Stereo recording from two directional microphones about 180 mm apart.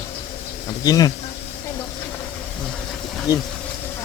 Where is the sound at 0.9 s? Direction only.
20° left (ahead or behind).